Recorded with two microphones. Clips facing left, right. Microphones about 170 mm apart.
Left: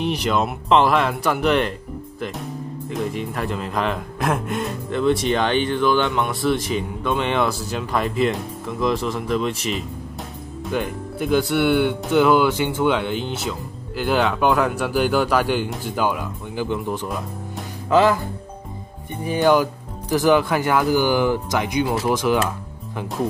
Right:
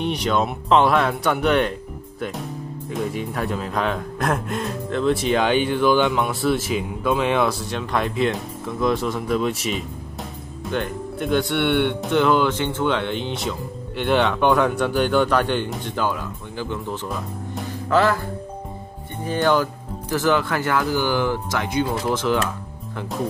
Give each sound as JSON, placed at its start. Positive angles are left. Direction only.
{"t": 0.0, "sound": "speech", "side_deg": 0}
{"t": 19.2, "sound": "speech", "side_deg": 15}